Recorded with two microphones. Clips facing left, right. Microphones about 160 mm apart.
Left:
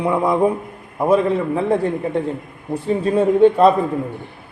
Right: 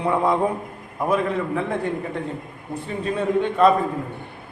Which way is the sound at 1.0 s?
30° left (ahead or behind).